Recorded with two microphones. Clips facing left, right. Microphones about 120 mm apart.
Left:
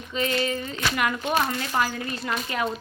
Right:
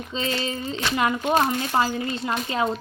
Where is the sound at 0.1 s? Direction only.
25° right (ahead or behind).